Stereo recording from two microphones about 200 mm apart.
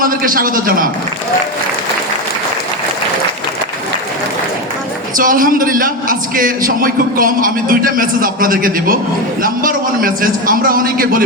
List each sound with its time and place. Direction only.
0.0 s a man's voice: 45° right (ahead or behind)
5.1 s a man's voice: 45° right (ahead or behind)